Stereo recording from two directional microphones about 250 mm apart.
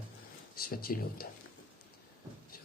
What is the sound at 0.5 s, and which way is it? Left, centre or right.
Speech, left.